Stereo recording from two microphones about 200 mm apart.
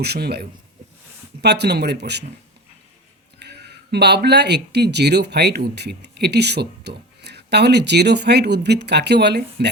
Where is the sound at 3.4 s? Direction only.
55° right (ahead or behind).